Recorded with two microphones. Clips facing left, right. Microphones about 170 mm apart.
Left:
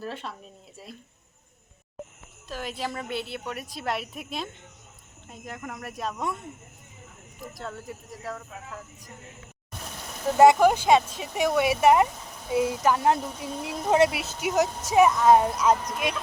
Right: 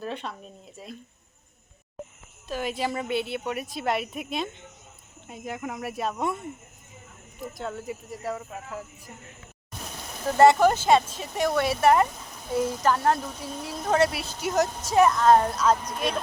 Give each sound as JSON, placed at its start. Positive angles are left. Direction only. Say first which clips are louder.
{"t": 0.0, "sound": "speech", "louder": "right 2 dB", "side_deg": 0}
{"t": 2.5, "sound": "speech", "louder": "right 4 dB", "side_deg": 0}
{"t": 7.5, "sound": "speech", "louder": "right 4 dB", "side_deg": 0}
{"t": 10.3, "sound": "speech", "louder": "left 1 dB", "side_deg": 10}